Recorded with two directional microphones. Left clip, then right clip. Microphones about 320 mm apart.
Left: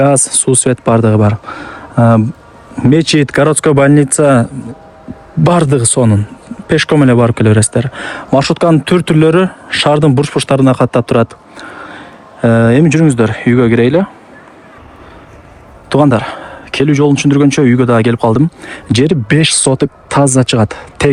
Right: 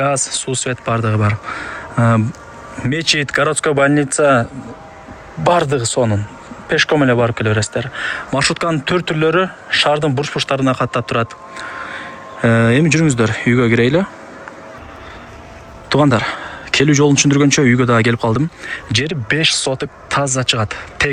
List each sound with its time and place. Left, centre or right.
0.0 s speech: centre
15.9 s speech: centre